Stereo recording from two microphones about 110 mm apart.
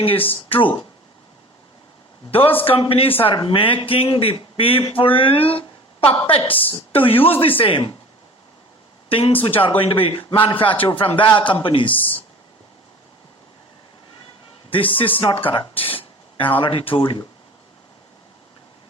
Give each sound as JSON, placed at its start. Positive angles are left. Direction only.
{"t": 0.0, "sound": "speech", "side_deg": 55}
{"t": 2.3, "sound": "speech", "side_deg": 55}
{"t": 9.0, "sound": "speech", "side_deg": 55}
{"t": 14.7, "sound": "speech", "side_deg": 55}
{"t": 16.4, "sound": "speech", "side_deg": 55}